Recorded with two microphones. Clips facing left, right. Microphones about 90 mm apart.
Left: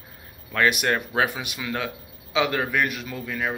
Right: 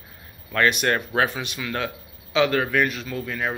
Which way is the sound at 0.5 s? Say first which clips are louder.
Right 1 dB; 10° left (ahead or behind).